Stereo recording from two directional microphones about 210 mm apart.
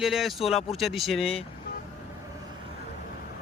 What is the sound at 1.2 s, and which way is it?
Speech, 25° left (ahead or behind).